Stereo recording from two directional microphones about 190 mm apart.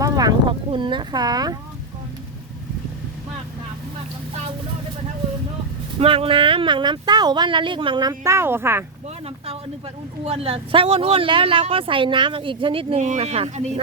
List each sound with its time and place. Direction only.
0.0 s a sound: 20° right (ahead or behind)
6.0 s speech: 30° right (ahead or behind); by 8.8 s 10° right (ahead or behind)
10.2 s speech: 30° right (ahead or behind)